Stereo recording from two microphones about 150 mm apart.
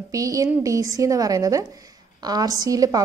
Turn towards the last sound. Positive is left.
turn(degrees=-25)  # may be behind; listen again after turning